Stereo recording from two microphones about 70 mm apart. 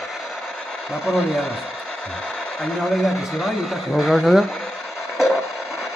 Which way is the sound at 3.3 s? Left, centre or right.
Centre.